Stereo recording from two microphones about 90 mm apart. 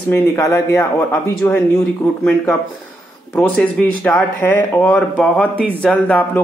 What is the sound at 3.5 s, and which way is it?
A man's voice, 5° left (ahead or behind).